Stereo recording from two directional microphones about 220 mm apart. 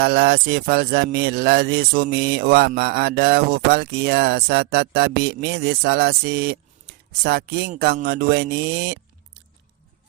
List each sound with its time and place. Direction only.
0.0 s speech: 45° right (ahead or behind)